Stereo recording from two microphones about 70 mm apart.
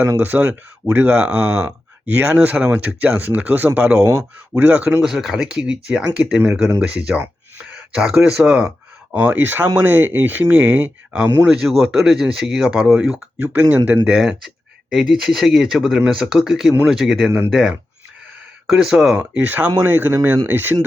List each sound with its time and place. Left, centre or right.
0.2 s speech: right
4.0 s speech: right
5.0 s speech: centre
7.6 s a sound: centre
8.2 s speech: centre
11.4 s speech: centre
13.4 s speech: right
14.1 s speech: centre; by 20.7 s right